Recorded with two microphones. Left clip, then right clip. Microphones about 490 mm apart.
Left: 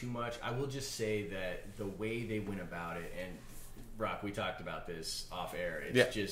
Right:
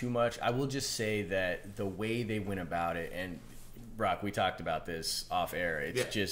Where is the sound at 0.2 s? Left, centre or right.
Right.